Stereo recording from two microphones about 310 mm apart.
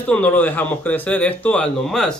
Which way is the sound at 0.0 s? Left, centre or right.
Centre.